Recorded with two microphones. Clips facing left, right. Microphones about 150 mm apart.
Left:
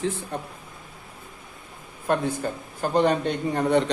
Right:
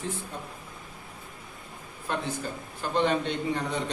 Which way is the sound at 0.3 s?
65° left (ahead or behind).